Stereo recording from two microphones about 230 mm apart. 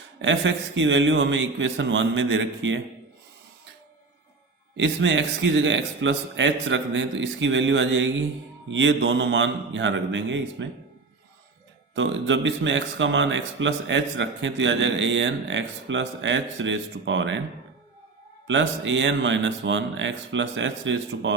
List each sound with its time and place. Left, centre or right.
0.2 s a man's voice: right
4.8 s a man's voice: right
11.9 s a man's voice: right
18.4 s a man's voice: right